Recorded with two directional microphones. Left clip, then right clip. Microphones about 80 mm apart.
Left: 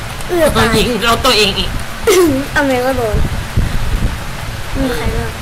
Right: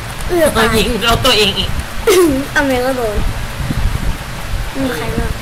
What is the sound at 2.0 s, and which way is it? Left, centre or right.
Speech, centre.